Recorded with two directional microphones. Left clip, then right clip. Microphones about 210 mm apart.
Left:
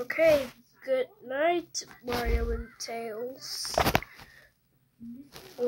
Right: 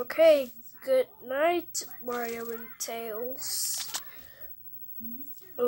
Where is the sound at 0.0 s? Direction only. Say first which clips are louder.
Right 2 dB; 5° left (ahead or behind).